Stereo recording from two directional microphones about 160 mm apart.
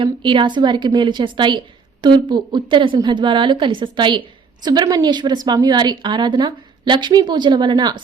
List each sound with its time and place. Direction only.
0.0 s a woman's voice: 30° right (ahead or behind)